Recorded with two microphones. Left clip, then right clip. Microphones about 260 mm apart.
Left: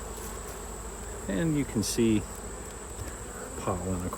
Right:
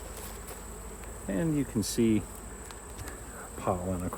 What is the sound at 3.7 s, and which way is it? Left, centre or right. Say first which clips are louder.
Speech: right 2 dB; centre.